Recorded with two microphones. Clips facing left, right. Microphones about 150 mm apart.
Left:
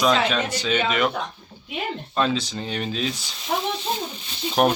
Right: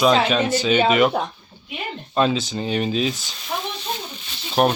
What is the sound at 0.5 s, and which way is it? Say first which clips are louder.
Speech: right 6 dB; 5° right (ahead or behind).